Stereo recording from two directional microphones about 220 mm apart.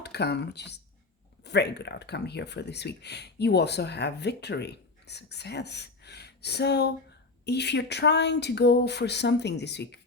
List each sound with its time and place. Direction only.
0.0 s speech: 50° left (ahead or behind)